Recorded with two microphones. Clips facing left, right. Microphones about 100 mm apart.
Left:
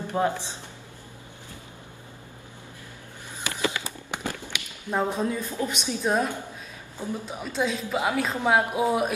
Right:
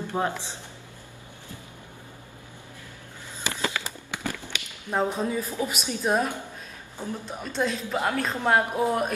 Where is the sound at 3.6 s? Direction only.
20° left (ahead or behind).